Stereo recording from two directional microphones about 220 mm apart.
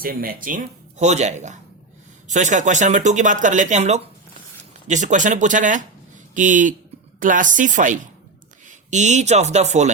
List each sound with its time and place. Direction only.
0.0 s speech: 40° right (ahead or behind)